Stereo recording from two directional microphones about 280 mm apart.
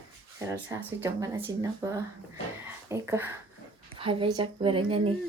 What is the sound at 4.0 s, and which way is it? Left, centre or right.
A woman's voice, centre.